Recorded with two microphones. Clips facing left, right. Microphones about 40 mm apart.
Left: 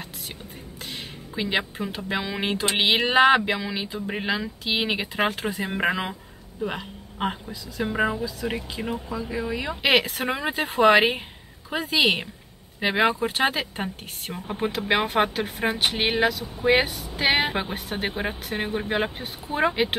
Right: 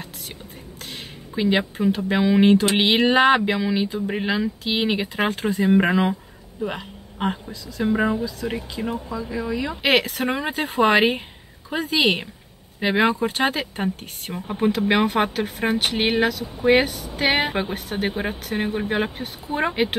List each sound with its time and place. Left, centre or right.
1.3 s speech: centre
9.7 s speech: centre